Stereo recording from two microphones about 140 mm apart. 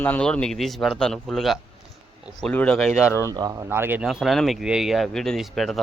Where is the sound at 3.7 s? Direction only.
15° right (ahead or behind).